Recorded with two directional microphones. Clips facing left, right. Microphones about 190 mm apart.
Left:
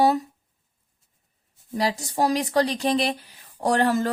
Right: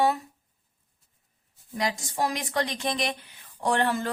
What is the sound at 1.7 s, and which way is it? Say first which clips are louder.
Speech: left 4 dB; 35° left (ahead or behind).